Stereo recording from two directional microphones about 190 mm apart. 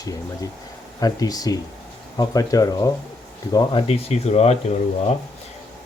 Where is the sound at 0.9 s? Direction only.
20° left (ahead or behind).